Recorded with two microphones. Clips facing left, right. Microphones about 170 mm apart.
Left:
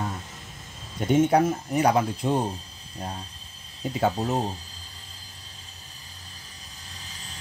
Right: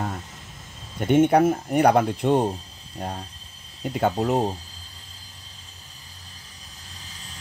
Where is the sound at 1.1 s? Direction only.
60° right (ahead or behind).